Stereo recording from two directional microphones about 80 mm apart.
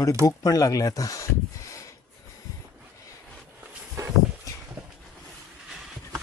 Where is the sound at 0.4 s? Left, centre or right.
Left.